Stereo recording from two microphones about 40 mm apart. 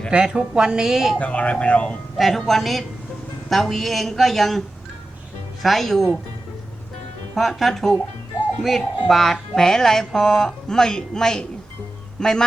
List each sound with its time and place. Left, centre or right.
0.1 s speech: right
1.2 s speech: left
2.1 s a woman's voice: centre
5.6 s a woman's voice: centre
7.3 s a woman's voice: centre
8.6 s music: centre